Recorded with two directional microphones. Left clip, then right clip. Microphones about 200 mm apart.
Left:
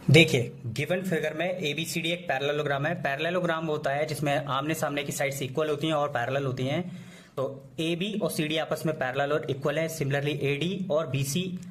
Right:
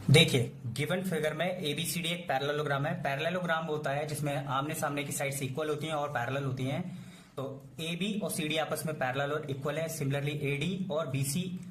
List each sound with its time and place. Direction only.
0.1 s a man's voice: 20° left (ahead or behind)